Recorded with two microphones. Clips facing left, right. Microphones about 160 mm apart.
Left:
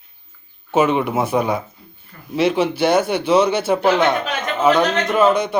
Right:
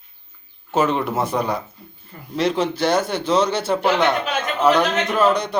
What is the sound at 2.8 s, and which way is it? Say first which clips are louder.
Speech: left 4 dB; 60° left (ahead or behind).